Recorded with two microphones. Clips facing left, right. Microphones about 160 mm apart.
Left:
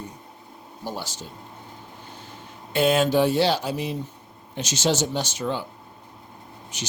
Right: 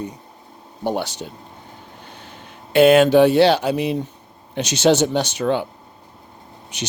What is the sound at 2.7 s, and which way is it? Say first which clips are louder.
Speech: right 8 dB; 65° right (ahead or behind).